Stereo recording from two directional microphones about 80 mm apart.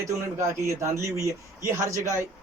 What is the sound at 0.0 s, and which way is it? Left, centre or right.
Speech, right.